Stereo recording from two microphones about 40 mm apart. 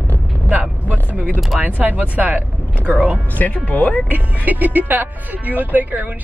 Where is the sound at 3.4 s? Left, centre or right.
Left.